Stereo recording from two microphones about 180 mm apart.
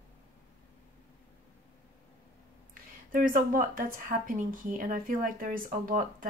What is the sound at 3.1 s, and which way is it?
Speech, 50° right (ahead or behind).